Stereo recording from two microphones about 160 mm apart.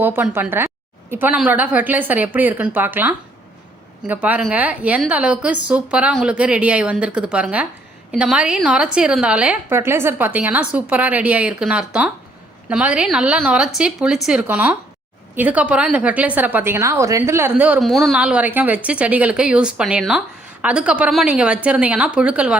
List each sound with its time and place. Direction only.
0.0 s a woman's voice: 10° right (ahead or behind)